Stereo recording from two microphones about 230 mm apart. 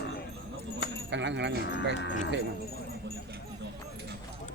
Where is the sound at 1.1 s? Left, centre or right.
Right.